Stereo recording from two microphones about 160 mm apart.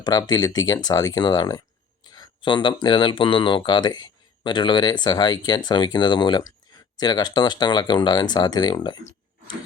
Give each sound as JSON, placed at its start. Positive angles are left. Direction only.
{"t": 0.0, "sound": "speech", "side_deg": 25}